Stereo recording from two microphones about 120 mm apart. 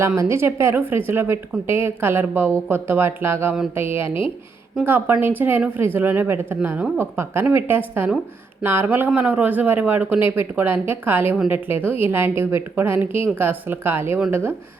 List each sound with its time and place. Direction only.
0.2 s a woman's voice: 20° right (ahead or behind)